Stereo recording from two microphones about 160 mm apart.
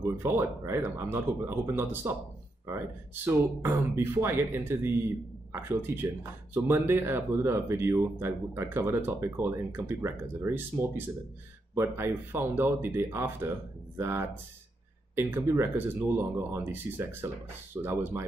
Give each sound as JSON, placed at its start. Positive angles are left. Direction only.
{"t": 0.0, "sound": "speech", "side_deg": -15}
{"t": 3.3, "sound": "speech", "side_deg": -15}